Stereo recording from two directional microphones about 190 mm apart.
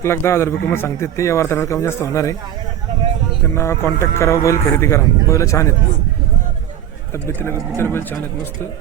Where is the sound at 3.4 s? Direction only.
15° left (ahead or behind).